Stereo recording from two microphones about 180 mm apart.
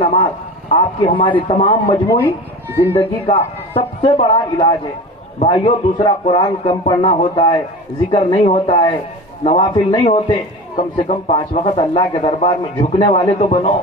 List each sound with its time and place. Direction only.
0.0 s a man's voice: 35° left (ahead or behind)
1.0 s a man's voice: 30° left (ahead or behind)
2.8 s speech: 10° left (ahead or behind)
3.3 s a man's voice: 30° left (ahead or behind)